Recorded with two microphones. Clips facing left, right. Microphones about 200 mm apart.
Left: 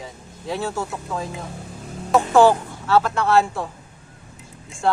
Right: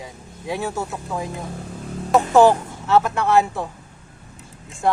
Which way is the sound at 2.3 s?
20° right (ahead or behind).